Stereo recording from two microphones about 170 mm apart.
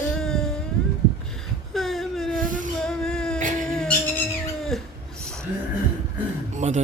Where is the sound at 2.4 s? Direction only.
50° right (ahead or behind).